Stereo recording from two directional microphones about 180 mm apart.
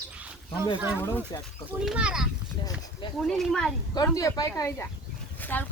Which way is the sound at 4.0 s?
20° left (ahead or behind).